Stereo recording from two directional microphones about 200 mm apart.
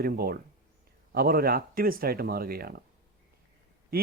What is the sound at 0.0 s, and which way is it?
Speech, 50° right (ahead or behind).